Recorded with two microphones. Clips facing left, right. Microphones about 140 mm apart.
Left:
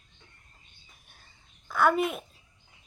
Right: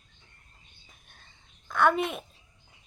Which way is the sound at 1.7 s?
5° left (ahead or behind).